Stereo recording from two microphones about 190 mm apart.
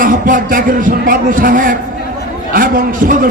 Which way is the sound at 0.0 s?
45° right (ahead or behind).